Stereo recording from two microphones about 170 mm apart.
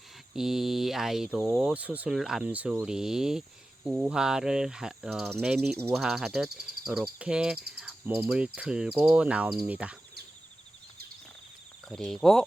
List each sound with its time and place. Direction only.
0.3 s speech: centre (ahead or behind)
7.8 s insect: 10° right (ahead or behind)
11.9 s speech: centre (ahead or behind)